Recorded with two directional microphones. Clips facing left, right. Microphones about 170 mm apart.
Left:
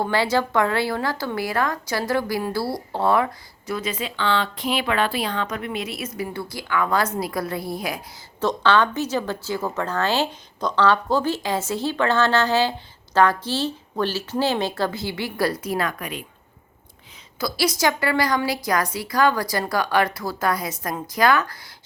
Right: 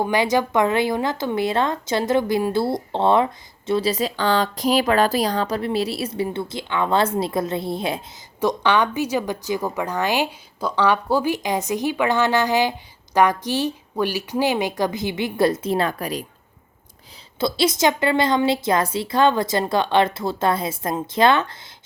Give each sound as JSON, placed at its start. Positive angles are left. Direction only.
{"t": 0.0, "sound": "a woman's voice", "side_deg": -15}
{"t": 8.4, "sound": "a woman's voice", "side_deg": -15}
{"t": 17.4, "sound": "a woman's voice", "side_deg": -25}